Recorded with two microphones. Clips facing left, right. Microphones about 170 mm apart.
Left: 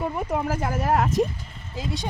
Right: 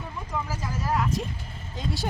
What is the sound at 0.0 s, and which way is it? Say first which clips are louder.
Speech: left 8 dB; 65° left (ahead or behind).